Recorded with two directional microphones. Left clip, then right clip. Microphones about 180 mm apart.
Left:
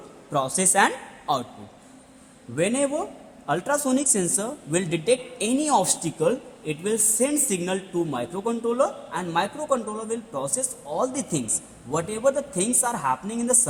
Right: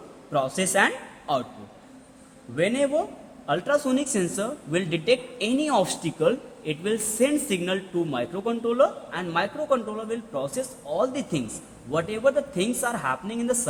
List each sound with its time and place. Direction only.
0.3 s a man's voice: 45° left (ahead or behind)
2.6 s speech: 40° left (ahead or behind)